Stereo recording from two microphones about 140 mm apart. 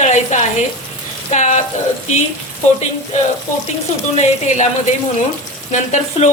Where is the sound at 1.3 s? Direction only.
55° left (ahead or behind).